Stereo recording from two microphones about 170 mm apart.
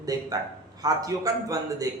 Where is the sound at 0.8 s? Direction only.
20° right (ahead or behind).